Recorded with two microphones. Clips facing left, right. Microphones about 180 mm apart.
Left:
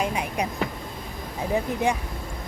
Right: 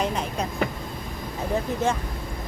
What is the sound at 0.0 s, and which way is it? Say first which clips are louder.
Vehicle: even; 10° left (ahead or behind).